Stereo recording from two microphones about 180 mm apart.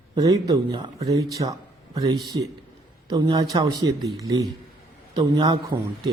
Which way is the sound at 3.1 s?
25° right (ahead or behind).